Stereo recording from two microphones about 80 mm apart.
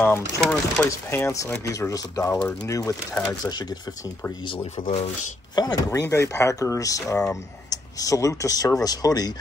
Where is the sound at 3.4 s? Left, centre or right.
Left.